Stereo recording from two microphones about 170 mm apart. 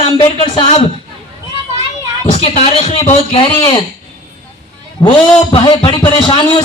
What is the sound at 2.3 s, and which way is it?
Speech, 40° left (ahead or behind).